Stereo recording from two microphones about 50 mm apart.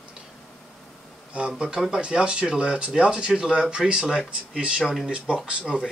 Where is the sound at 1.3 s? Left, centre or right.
Right.